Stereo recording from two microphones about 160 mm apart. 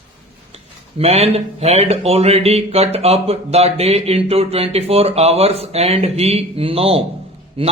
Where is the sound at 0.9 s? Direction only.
40° right (ahead or behind).